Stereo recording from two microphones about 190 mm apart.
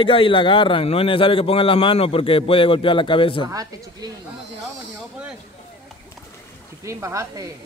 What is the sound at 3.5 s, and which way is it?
Speech, 20° right (ahead or behind).